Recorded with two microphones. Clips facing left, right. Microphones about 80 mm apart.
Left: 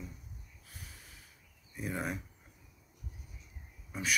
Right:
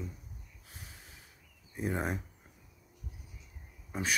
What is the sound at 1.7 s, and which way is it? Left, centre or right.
Speech, right.